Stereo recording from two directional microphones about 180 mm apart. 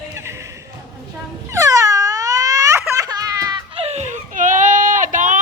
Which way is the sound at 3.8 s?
40° right (ahead or behind).